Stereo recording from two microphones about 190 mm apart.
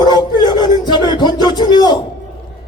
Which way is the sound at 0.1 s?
20° left (ahead or behind).